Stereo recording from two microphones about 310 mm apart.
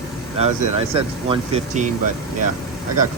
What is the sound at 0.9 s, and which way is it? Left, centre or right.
Speech, centre.